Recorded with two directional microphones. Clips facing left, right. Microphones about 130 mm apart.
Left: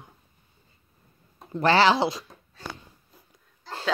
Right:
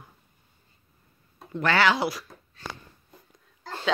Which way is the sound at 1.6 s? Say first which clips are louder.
Left 3 dB; 30° left (ahead or behind).